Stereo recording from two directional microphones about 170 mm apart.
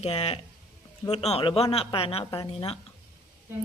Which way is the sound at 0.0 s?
35° left (ahead or behind).